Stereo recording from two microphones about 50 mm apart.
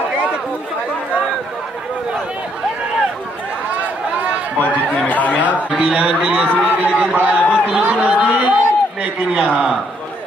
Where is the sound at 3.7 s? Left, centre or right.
Right.